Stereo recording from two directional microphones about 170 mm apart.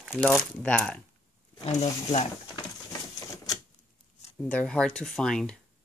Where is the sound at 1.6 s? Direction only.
40° left (ahead or behind).